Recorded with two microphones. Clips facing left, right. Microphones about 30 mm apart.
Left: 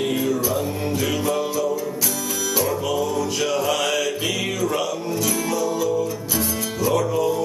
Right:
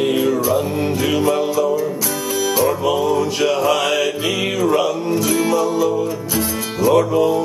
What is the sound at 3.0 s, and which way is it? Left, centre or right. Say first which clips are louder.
Speech: right 6 dB; right.